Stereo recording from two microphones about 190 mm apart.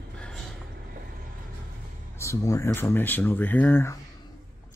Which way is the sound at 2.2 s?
15° left (ahead or behind).